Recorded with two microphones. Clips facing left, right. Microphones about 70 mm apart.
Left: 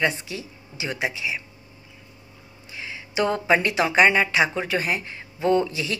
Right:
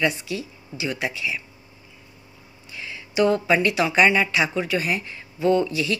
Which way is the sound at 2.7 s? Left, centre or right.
Left.